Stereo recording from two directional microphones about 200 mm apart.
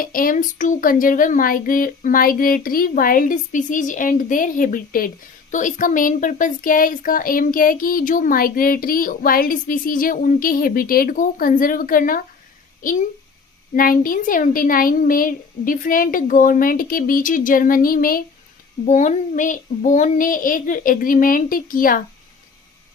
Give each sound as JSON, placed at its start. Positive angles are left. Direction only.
{"t": 0.0, "sound": "speech", "side_deg": 45}